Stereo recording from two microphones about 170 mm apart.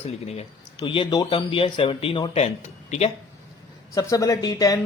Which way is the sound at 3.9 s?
20° left (ahead or behind).